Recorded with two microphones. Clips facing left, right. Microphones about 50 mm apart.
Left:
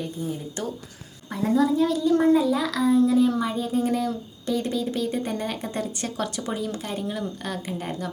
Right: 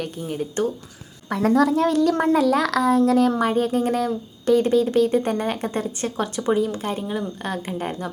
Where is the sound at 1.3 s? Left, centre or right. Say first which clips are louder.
Right 4 dB; right.